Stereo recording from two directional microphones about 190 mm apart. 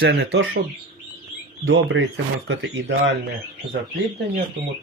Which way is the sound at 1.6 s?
70° right (ahead or behind).